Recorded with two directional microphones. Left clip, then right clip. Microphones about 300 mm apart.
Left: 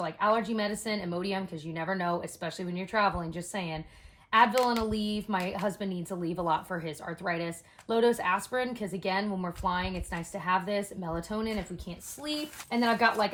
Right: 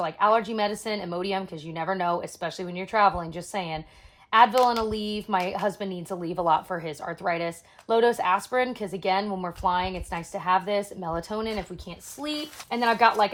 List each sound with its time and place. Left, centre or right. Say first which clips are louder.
0.0 s speech: right 5 dB; centre
4.9 s speech: right 5 dB; centre